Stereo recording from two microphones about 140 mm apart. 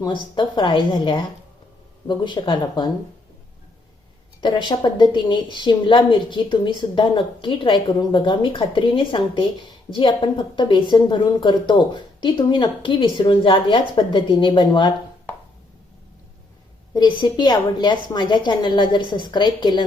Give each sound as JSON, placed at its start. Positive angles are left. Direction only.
{"t": 0.0, "sound": "speech", "side_deg": 35}
{"t": 4.4, "sound": "speech", "side_deg": 30}
{"t": 16.9, "sound": "speech", "side_deg": 30}